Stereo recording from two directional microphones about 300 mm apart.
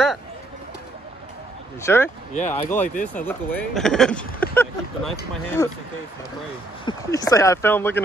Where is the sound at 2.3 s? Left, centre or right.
Left.